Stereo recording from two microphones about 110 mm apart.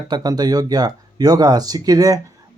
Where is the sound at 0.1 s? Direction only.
40° right (ahead or behind).